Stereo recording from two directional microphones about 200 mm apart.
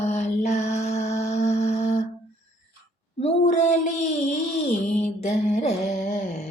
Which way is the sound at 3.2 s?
35° left (ahead or behind).